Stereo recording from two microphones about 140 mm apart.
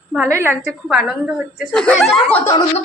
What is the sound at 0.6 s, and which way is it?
Speech, 5° right (ahead or behind).